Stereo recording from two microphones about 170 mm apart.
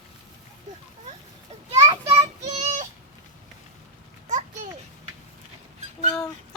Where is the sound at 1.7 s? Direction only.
25° right (ahead or behind).